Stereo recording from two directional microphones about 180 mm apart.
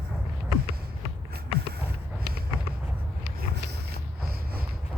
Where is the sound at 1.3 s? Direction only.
60° right (ahead or behind).